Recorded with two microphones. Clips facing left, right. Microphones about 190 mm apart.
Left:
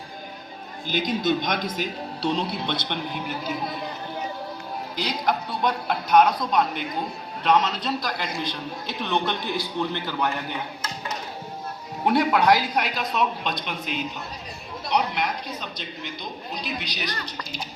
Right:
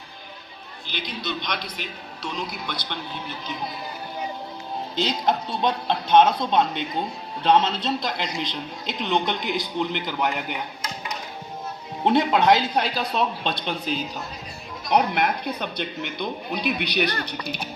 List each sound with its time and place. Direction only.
0.9 s a man's voice: 45° left (ahead or behind); by 3.8 s 5° left (ahead or behind)
4.9 s speech: 25° right (ahead or behind)
12.0 s speech: 25° right (ahead or behind)
14.8 s a man's voice: 50° right (ahead or behind)